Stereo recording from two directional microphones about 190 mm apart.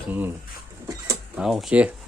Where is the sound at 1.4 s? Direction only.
Centre (ahead or behind).